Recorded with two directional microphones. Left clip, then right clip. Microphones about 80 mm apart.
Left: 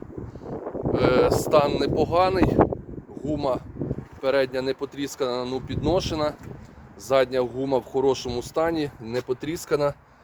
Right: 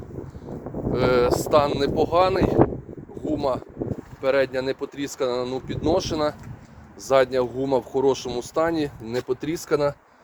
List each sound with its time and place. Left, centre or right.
0.9 s speech: left
3.2 s speech: left
7.1 s speech: centre
7.6 s speech: centre